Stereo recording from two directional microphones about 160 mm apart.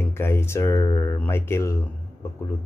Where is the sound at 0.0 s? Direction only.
15° left (ahead or behind).